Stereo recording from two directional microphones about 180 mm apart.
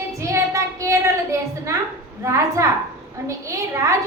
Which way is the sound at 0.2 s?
15° right (ahead or behind).